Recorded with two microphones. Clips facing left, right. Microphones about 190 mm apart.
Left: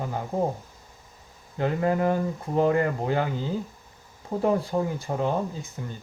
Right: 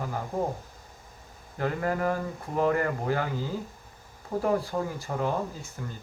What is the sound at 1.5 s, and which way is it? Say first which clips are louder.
Speech: left 4 dB; 20° left (ahead or behind).